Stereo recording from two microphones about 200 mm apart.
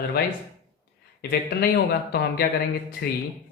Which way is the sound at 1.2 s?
50° left (ahead or behind).